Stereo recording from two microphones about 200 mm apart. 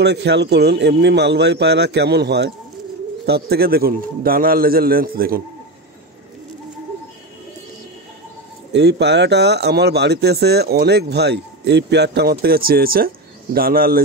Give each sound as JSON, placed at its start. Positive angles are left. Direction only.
{"t": 0.0, "sound": "a man's voice", "side_deg": -55}
{"t": 8.7, "sound": "speech", "side_deg": -60}